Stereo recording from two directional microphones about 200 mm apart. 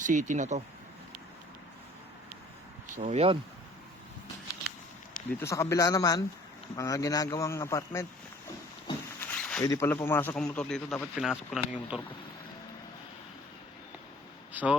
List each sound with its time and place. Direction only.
0.0 s speech: 40° right (ahead or behind)
2.9 s speech: 35° right (ahead or behind)
5.3 s speech: 15° left (ahead or behind)
9.2 s zipper: 5° left (ahead or behind)
9.6 s speech: 15° left (ahead or behind); by 12.0 s 5° right (ahead or behind)
14.5 s speech: 5° right (ahead or behind)